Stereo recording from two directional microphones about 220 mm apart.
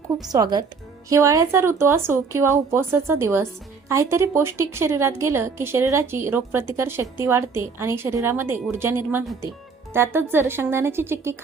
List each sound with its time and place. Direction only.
0.3 s a woman's voice: 15° right (ahead or behind)